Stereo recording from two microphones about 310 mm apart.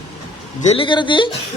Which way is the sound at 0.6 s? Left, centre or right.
Centre.